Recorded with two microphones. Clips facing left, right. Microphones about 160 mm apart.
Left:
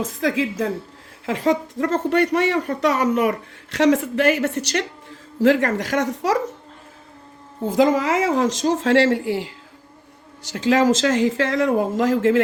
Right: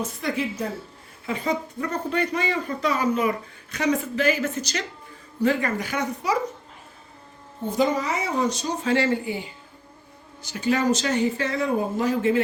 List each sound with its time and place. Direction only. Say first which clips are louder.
0.0 s speech: left 5 dB; 90° left
7.7 s speech: left 6 dB; 90° left